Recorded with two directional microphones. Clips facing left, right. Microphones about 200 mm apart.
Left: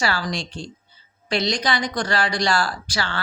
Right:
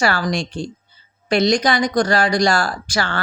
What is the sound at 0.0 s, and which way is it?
A woman's voice, 50° right (ahead or behind).